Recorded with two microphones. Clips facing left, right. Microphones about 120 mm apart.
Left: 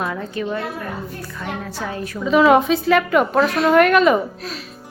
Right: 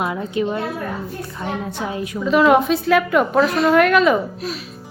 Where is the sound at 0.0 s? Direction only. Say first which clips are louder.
Right 3 dB; 20° right (ahead or behind).